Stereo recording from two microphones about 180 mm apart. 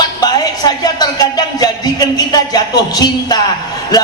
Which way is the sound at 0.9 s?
20° left (ahead or behind).